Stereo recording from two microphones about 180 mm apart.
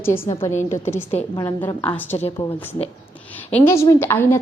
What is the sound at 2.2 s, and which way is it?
Speech, 35° left (ahead or behind).